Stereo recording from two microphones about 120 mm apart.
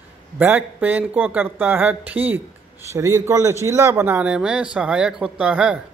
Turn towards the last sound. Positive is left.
turn(degrees=-10)  # may be behind; listen again after turning